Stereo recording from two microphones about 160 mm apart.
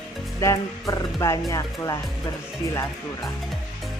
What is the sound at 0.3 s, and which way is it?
Speech, 20° left (ahead or behind).